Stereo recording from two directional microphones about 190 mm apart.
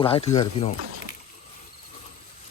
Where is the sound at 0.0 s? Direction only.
30° left (ahead or behind).